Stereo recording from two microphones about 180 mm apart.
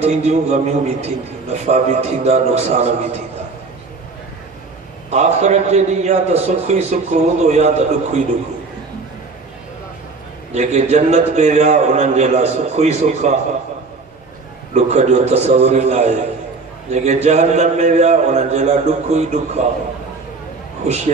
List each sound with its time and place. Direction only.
0.0 s a man's voice: 40° right (ahead or behind)
5.1 s a man's voice: 40° right (ahead or behind)
10.5 s a man's voice: 40° right (ahead or behind)
14.7 s a man's voice: 40° right (ahead or behind)
20.8 s a man's voice: 40° right (ahead or behind)